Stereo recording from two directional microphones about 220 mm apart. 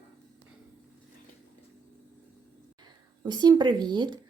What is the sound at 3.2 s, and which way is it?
Speech, 20° right (ahead or behind).